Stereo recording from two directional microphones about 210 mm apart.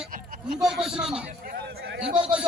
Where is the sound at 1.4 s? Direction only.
50° right (ahead or behind).